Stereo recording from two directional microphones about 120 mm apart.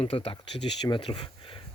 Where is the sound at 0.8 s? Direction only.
40° left (ahead or behind).